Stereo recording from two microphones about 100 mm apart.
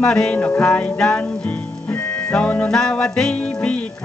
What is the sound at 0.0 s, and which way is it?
Music, 5° left (ahead or behind).